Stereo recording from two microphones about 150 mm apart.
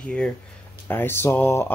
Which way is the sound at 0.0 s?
5° left (ahead or behind).